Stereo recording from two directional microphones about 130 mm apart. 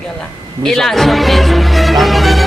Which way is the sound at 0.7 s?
5° left (ahead or behind).